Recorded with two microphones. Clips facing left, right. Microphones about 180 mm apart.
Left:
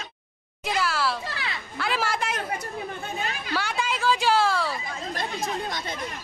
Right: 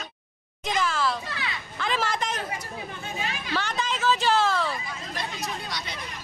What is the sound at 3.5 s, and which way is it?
Vehicle, 10° left (ahead or behind).